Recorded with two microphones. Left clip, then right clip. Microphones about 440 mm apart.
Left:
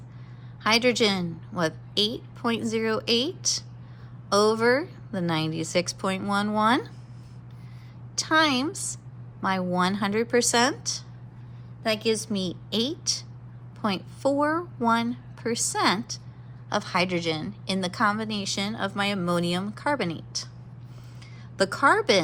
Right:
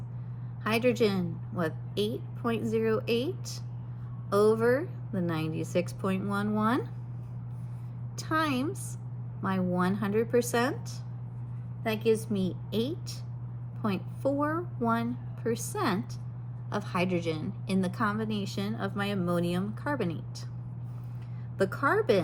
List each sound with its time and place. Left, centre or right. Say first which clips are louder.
0.7 s a woman's voice: left 5 dB; left
8.2 s a woman's voice: left 7 dB; left
21.6 s a woman's voice: left 6 dB; left